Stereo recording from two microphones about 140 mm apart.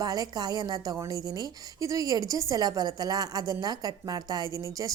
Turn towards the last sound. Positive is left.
turn(degrees=-25)  # may be behind; listen again after turning